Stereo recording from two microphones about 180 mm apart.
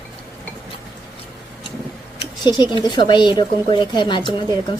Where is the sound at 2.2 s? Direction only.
25° left (ahead or behind).